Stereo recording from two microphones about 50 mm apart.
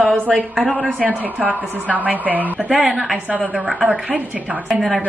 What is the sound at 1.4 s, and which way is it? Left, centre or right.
A woman's voice, right.